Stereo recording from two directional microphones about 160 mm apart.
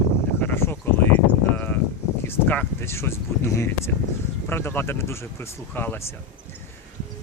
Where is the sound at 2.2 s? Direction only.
15° left (ahead or behind).